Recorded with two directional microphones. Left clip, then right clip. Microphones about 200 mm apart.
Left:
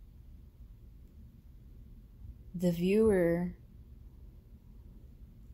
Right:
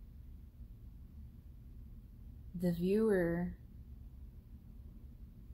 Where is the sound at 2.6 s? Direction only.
30° left (ahead or behind).